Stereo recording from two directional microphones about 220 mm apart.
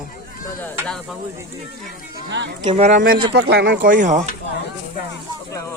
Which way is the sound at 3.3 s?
50° right (ahead or behind).